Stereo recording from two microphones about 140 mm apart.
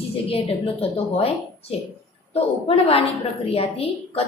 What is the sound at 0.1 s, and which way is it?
A woman's voice, 45° left (ahead or behind).